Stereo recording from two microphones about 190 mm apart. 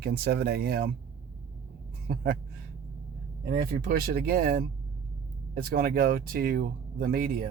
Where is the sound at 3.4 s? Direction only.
50° right (ahead or behind).